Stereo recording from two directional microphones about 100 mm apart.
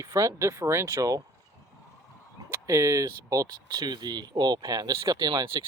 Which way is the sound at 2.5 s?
30° right (ahead or behind).